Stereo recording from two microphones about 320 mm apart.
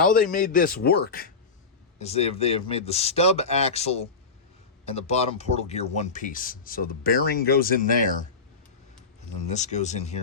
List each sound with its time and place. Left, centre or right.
0.0 s speech: left
9.5 s speech: left